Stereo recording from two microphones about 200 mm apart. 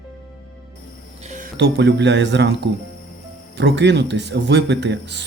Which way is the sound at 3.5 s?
60° right (ahead or behind).